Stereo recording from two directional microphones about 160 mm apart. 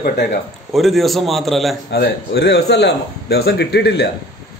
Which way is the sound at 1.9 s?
90° left.